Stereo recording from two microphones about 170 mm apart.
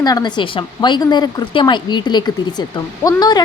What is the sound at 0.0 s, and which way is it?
A woman's voice, 25° left (ahead or behind).